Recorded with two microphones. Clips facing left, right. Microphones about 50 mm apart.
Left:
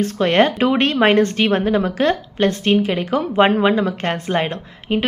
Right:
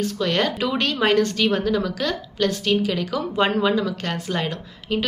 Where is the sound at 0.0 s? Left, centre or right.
Left.